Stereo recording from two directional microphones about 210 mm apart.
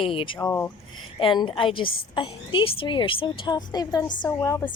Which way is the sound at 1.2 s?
25° left (ahead or behind).